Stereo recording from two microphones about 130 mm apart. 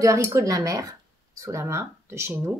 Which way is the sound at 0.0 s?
25° right (ahead or behind).